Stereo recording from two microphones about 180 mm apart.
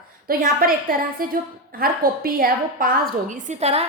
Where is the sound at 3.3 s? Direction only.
40° right (ahead or behind).